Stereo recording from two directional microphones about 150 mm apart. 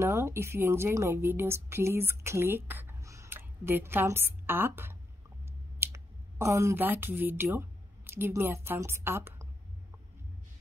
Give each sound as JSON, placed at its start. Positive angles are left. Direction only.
{"t": 0.0, "sound": "a woman's voice", "side_deg": -15}